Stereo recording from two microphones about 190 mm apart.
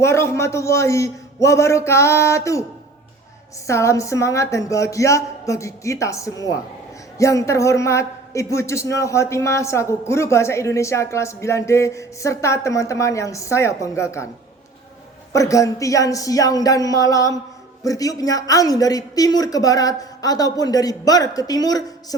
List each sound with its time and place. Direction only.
0.0 s a man's voice: 15° left (ahead or behind)
3.7 s a man's voice: 15° left (ahead or behind)
15.3 s a man's voice: 15° left (ahead or behind)